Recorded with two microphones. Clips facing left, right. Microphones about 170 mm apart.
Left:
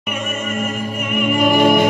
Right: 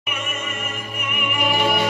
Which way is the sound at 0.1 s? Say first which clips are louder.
Left 7 dB; 40° left (ahead or behind).